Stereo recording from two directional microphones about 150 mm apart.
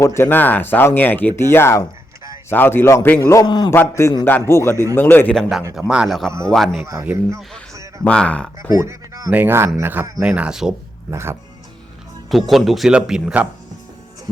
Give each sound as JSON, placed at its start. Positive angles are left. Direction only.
{"t": 0.0, "sound": "a man's voice", "side_deg": 15}
{"t": 3.7, "sound": "speech", "side_deg": 20}
{"t": 7.0, "sound": "speech", "side_deg": -10}
{"t": 7.7, "sound": "a sound", "side_deg": -20}
{"t": 8.0, "sound": "speech", "side_deg": 5}
{"t": 8.7, "sound": "speech", "side_deg": -25}
{"t": 11.1, "sound": "speech", "side_deg": -15}
{"t": 12.3, "sound": "speech", "side_deg": 0}